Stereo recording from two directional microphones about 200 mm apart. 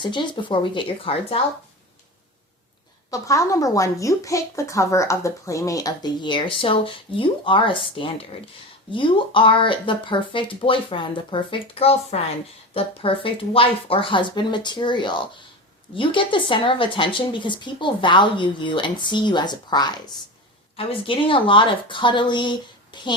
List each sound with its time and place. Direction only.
0.0 s speech: 25° left (ahead or behind)
3.1 s speech: 15° left (ahead or behind)